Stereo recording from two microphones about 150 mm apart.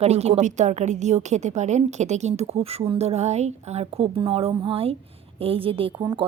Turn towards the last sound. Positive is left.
turn(degrees=-40)  # may be behind; listen again after turning